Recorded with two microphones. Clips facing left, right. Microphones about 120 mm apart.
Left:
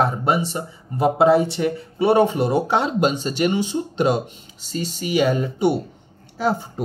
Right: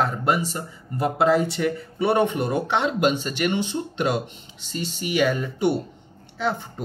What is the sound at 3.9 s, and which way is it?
Speech, 40° left (ahead or behind).